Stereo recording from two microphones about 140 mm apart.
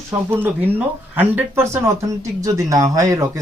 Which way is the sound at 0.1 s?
15° right (ahead or behind).